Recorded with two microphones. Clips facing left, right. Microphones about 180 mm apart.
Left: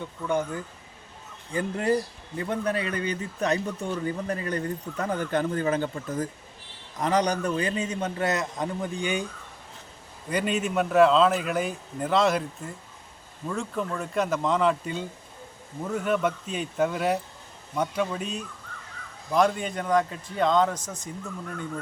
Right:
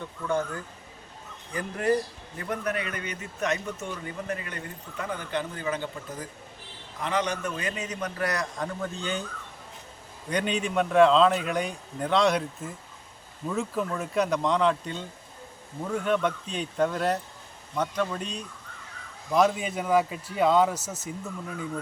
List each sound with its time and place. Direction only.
0.3 s a man's voice: 15° left (ahead or behind)
10.2 s a man's voice: 5° left (ahead or behind)